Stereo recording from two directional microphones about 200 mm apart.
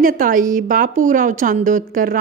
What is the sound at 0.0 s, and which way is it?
A woman's voice, 45° right (ahead or behind).